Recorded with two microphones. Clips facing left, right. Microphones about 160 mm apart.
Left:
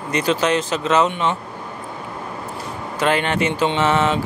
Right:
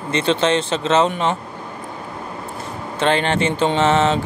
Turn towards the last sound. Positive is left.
turn(degrees=-30)  # may be behind; listen again after turning